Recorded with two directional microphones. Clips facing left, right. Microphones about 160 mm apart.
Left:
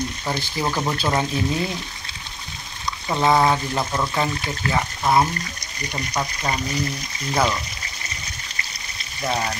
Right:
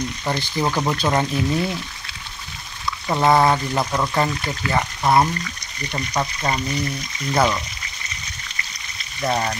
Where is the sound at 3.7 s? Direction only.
10° right (ahead or behind).